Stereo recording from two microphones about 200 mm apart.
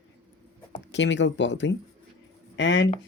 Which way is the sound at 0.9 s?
65° left (ahead or behind).